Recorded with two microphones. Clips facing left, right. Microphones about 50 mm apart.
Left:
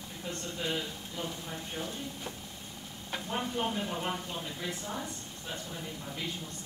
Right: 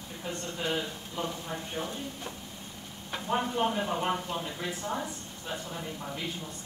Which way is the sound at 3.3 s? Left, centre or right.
Right.